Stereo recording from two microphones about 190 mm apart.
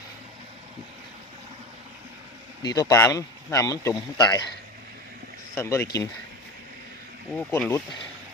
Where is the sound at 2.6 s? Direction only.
20° left (ahead or behind).